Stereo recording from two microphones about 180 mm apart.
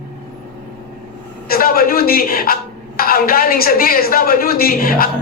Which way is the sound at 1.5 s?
55° left (ahead or behind).